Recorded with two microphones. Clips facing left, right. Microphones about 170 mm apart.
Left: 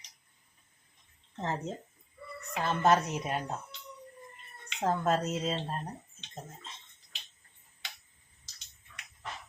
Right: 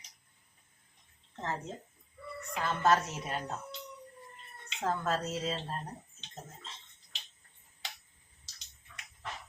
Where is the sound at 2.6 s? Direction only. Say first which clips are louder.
Left 2 dB; 20° left (ahead or behind).